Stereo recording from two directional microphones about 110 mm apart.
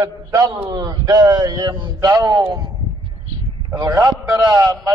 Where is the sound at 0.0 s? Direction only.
35° right (ahead or behind).